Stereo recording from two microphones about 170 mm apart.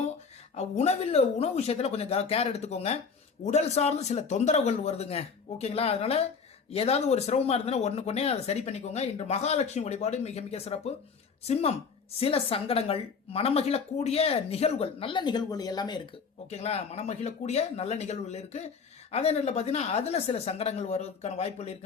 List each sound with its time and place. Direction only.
0.5 s speech: 40° left (ahead or behind); by 16.0 s 25° left (ahead or behind)
16.5 s speech: 40° left (ahead or behind)